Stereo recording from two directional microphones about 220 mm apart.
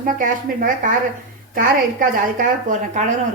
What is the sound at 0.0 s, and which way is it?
Speech, 35° right (ahead or behind).